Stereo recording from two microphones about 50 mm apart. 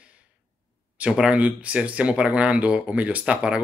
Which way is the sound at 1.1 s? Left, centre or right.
Centre.